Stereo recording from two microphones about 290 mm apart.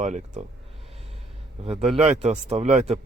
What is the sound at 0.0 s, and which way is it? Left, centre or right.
Speech, right.